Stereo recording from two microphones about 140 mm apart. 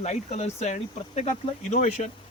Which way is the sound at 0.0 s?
55° left (ahead or behind).